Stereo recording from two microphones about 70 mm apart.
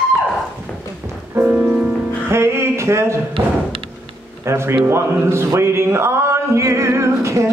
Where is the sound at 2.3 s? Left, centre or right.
Right.